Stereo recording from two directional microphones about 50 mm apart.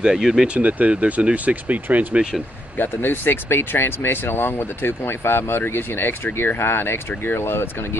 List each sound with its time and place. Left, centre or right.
0.0 s speech: centre
0.6 s speech: right
2.8 s speech: left